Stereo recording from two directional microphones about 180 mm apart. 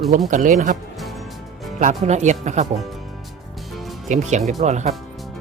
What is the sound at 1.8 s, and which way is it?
Speech, 40° right (ahead or behind).